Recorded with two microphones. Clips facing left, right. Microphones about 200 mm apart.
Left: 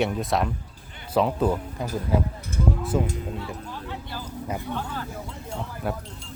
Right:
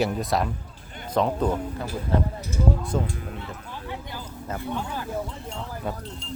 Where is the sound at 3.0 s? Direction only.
20° left (ahead or behind).